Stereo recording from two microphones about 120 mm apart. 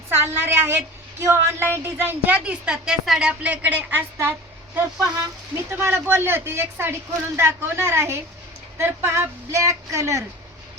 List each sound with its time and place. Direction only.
0.1 s a woman's voice: 20° right (ahead or behind)